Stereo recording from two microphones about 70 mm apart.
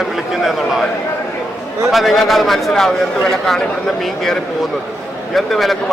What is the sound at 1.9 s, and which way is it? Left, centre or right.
Speech, centre.